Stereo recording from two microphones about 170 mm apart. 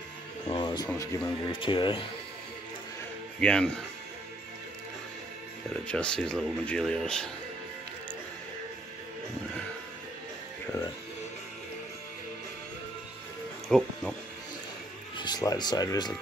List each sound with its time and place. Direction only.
0.5 s music: 25° left (ahead or behind)
0.8 s speech: 20° left (ahead or behind)
1.5 s speech: 30° left (ahead or behind)
3.3 s speech: 5° left (ahead or behind)
5.7 s speech: 5° left (ahead or behind)
13.7 s speech: centre (ahead or behind)
15.1 s speech: 25° left (ahead or behind)